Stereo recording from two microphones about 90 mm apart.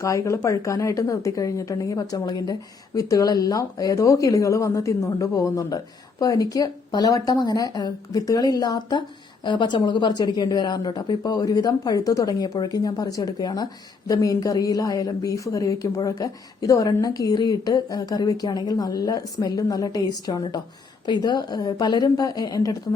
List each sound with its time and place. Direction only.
0.0 s a woman's voice: 35° left (ahead or behind)